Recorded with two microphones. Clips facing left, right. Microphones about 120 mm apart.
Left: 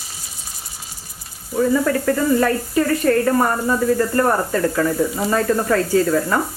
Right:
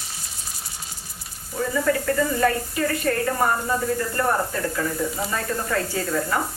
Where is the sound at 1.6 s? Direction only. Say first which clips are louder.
Left 5 dB; 45° left (ahead or behind).